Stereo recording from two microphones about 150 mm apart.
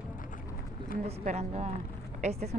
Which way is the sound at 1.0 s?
45° right (ahead or behind).